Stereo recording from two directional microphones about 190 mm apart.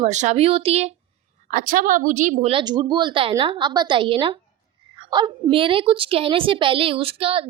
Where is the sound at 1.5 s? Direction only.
45° right (ahead or behind).